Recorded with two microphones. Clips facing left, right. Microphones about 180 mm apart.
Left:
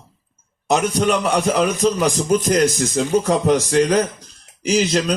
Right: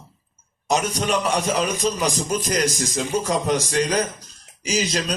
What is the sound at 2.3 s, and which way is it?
A man's voice, 55° left (ahead or behind).